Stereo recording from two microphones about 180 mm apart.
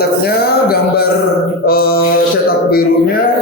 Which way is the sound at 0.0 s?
60° left (ahead or behind).